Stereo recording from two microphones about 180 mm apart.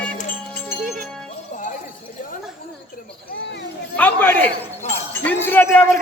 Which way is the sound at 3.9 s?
10° left (ahead or behind).